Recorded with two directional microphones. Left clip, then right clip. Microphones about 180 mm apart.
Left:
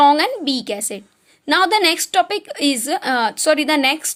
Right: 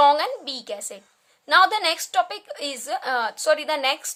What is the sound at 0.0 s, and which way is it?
A woman's voice, 15° left (ahead or behind).